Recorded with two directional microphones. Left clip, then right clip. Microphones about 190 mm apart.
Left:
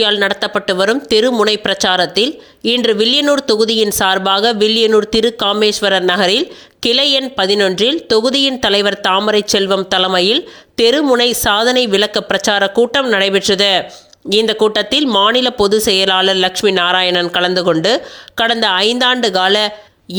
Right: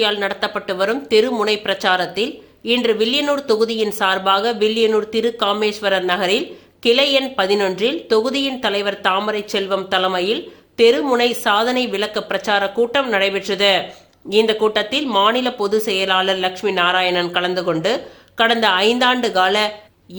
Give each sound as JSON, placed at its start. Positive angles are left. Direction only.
{"t": 0.0, "sound": "speech", "side_deg": 35}